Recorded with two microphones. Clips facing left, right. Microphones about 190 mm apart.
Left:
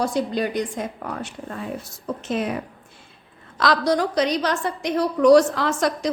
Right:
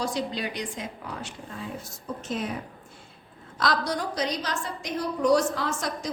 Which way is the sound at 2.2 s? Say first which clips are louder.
Left 6 dB; 75° left (ahead or behind).